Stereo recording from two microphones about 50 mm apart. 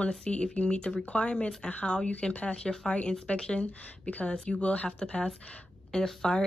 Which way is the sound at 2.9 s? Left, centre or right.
Left.